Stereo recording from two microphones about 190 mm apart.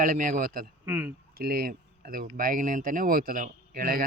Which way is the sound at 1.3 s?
50° right (ahead or behind).